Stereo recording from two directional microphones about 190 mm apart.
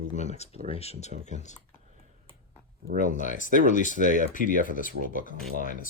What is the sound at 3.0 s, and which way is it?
Speech, 40° left (ahead or behind).